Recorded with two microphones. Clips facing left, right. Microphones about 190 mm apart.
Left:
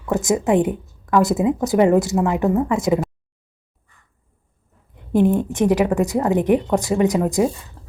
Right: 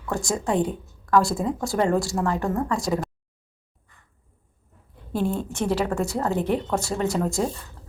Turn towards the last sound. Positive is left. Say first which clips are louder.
# left 6 dB
turn(degrees=10)  # may be behind; listen again after turning